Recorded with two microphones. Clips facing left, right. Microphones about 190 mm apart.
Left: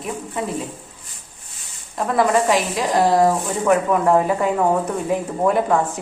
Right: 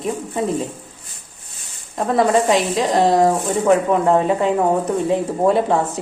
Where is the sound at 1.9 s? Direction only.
30° right (ahead or behind).